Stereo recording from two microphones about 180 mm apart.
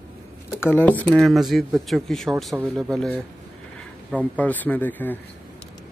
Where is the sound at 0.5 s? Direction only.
10° left (ahead or behind).